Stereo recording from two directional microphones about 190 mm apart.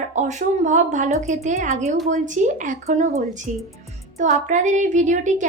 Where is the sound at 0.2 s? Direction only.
40° right (ahead or behind).